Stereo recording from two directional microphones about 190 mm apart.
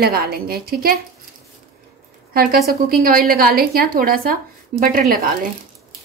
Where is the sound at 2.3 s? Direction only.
50° right (ahead or behind).